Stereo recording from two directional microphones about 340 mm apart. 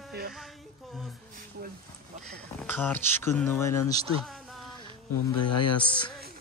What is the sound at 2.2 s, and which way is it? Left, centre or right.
Speech, centre.